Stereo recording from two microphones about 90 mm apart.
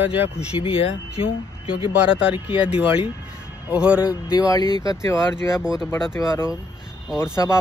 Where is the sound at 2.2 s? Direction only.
10° right (ahead or behind).